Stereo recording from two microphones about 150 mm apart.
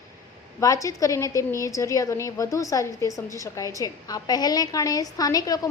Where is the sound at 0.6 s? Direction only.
20° left (ahead or behind).